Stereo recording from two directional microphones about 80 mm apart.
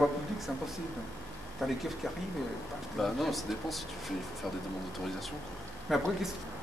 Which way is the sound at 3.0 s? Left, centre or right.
Centre.